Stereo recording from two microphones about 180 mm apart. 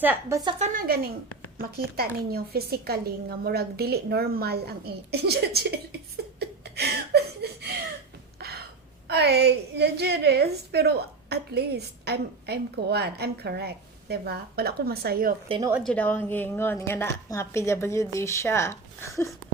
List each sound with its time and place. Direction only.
0.0 s a woman's voice: 15° right (ahead or behind)
0.6 s a woman's voice: 50° right (ahead or behind)
6.4 s a sound: 65° right (ahead or behind)
9.0 s a woman's voice: 65° right (ahead or behind)
15.8 s a woman's voice: 10° left (ahead or behind)